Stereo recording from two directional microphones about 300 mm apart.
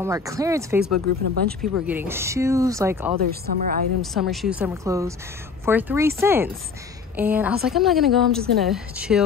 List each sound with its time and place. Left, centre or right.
0.0 s speech: centre
0.7 s speech: right
1.6 s speech: centre
3.2 s speech: right
4.0 s a woman's voice: centre